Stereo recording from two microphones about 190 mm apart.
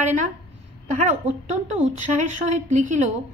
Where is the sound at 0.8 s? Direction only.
40° right (ahead or behind).